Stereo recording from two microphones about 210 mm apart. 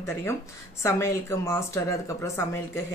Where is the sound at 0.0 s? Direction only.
10° left (ahead or behind).